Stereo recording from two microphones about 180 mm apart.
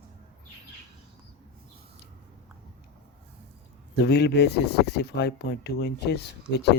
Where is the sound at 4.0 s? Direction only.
65° left (ahead or behind).